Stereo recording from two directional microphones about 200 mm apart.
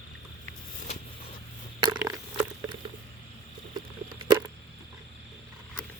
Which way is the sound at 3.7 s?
25° right (ahead or behind).